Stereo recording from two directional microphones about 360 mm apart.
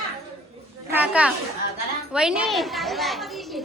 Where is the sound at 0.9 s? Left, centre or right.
Centre.